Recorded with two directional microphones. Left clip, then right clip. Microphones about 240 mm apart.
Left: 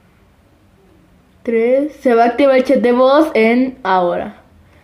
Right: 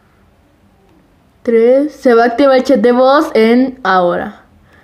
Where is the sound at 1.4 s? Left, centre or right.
Right.